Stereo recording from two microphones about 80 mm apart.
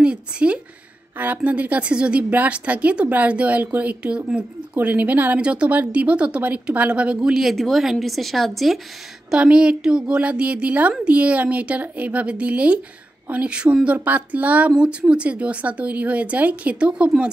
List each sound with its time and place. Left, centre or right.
0.0 s a woman's voice: centre
9.3 s a woman's voice: centre